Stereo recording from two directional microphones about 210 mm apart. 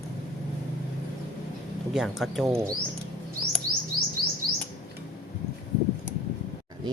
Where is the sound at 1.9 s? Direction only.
Centre (ahead or behind).